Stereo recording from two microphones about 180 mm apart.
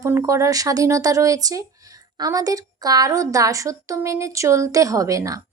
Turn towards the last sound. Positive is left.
turn(degrees=-20)  # may be behind; listen again after turning